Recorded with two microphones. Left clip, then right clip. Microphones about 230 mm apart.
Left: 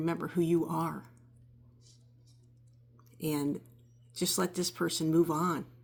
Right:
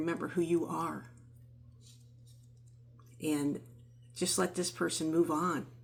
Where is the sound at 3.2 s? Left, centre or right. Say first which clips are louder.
Even; left.